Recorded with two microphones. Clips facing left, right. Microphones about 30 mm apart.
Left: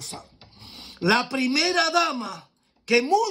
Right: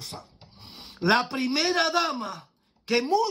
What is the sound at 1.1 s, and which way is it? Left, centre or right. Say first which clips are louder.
Speech: left 2 dB; left.